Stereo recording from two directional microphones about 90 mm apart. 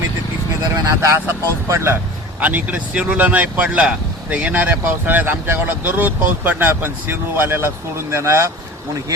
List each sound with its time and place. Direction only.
0.7 s speech: 30° right (ahead or behind)
2.4 s speech: 20° right (ahead or behind)